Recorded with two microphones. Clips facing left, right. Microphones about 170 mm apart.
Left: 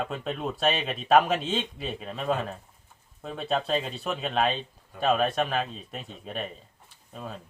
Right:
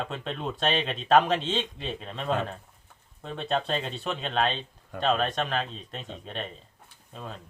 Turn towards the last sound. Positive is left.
turn(degrees=5)  # may be behind; listen again after turning